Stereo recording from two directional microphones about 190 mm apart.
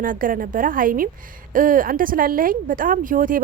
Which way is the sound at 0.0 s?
45° right (ahead or behind).